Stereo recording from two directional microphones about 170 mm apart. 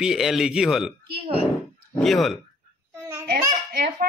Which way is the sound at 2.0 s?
Centre (ahead or behind).